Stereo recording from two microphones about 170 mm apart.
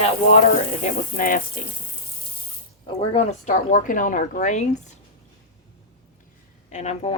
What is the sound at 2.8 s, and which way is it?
A woman's voice, 35° left (ahead or behind).